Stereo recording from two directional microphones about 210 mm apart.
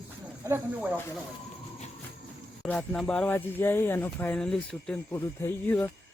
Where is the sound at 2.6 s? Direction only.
5° left (ahead or behind).